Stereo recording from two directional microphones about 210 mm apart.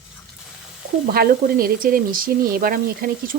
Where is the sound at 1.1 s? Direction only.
45° right (ahead or behind).